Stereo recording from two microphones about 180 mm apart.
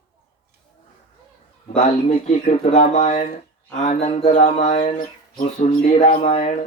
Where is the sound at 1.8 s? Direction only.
40° left (ahead or behind).